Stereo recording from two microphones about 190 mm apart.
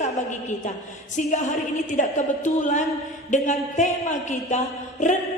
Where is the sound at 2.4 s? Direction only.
40° left (ahead or behind).